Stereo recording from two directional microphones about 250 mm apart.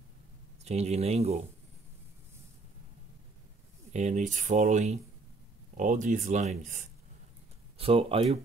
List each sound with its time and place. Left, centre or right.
0.7 s speech: right
3.9 s speech: right